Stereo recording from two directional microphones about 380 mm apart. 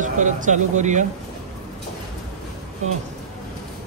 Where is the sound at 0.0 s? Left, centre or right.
Centre.